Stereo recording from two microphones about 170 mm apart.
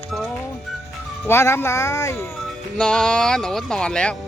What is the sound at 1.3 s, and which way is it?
Speech, 15° left (ahead or behind).